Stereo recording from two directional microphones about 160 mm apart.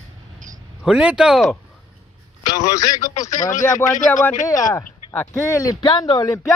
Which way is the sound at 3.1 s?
50° left (ahead or behind).